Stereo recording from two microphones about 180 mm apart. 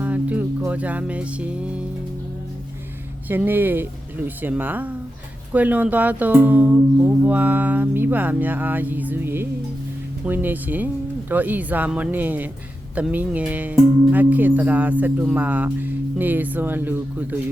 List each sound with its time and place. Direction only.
0.0 s music: 10° right (ahead or behind)
3.2 s speech: 10° right (ahead or behind)